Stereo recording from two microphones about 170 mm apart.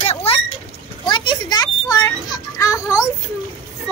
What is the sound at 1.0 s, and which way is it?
Children playing, 25° left (ahead or behind).